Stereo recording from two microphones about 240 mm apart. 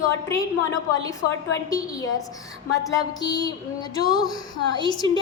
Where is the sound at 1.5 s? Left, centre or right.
Centre.